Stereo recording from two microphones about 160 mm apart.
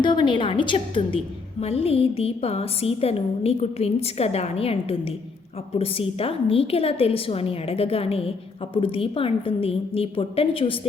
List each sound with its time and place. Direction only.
0.0 s a woman's voice: 30° left (ahead or behind)